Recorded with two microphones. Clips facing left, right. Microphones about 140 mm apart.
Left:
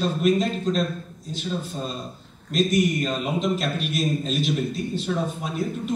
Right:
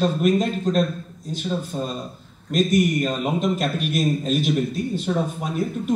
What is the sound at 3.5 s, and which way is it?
A man's voice, 50° right (ahead or behind).